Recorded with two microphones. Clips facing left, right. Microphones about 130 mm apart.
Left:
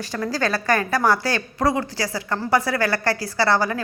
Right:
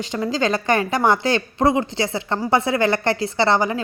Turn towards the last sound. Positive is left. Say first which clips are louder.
# right 2 dB
turn(degrees=-20)  # may be behind; listen again after turning